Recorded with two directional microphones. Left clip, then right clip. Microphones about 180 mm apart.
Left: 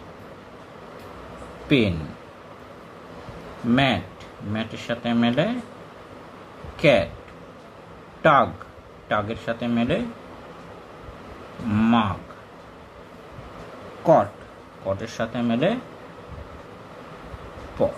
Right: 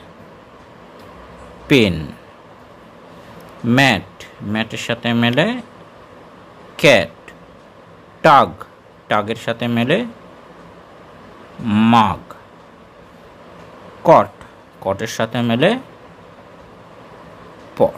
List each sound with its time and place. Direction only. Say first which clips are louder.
1.7 s speech: right 7 dB; 45° right (ahead or behind)
3.7 s speech: right 7 dB; 45° right (ahead or behind)
6.8 s speech: right 6 dB; 45° right (ahead or behind)
8.2 s speech: right 7 dB; 45° right (ahead or behind)
11.7 s speech: right 9 dB; 45° right (ahead or behind)
14.0 s speech: right 7 dB; 45° right (ahead or behind)